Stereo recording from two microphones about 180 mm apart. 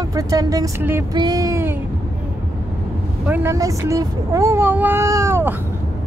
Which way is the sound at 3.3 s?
15° right (ahead or behind).